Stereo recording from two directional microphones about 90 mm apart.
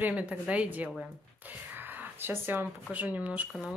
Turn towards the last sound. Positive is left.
turn(degrees=0)  # may be behind; listen again after turning